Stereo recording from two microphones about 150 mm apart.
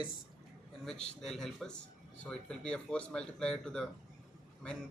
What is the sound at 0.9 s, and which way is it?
Speech, 5° left (ahead or behind).